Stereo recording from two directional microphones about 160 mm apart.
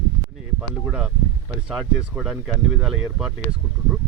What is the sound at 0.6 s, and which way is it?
Speech, 5° right (ahead or behind).